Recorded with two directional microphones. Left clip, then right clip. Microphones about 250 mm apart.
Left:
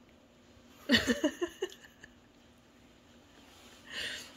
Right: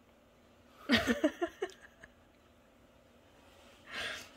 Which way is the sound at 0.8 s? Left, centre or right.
Right.